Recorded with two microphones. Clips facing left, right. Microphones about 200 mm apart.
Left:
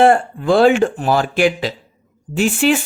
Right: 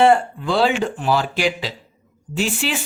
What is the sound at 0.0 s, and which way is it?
Speech, 50° left (ahead or behind).